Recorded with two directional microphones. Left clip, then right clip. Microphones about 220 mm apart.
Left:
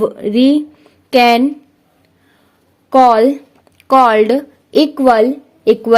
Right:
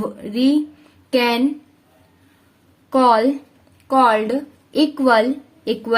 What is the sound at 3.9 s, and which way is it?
A woman's voice, 40° left (ahead or behind).